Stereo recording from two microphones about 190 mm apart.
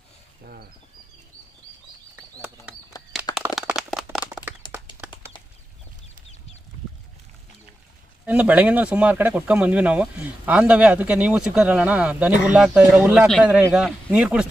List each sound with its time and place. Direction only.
0.4 s a sound: 50° right (ahead or behind)
2.1 s bird: 10° right (ahead or behind)
2.9 s bird flight: 20° left (ahead or behind)
3.3 s a sound: 5° right (ahead or behind)
4.6 s clip-clop: 25° left (ahead or behind)
8.2 s speech: 10° right (ahead or behind)